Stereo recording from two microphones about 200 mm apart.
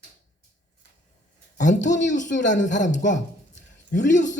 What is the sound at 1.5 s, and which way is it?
A man's voice, 40° left (ahead or behind).